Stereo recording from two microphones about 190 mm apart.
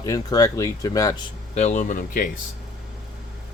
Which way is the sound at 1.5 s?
40° left (ahead or behind).